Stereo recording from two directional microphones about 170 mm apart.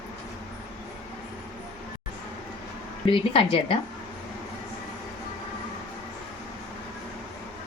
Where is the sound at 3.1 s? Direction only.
30° left (ahead or behind).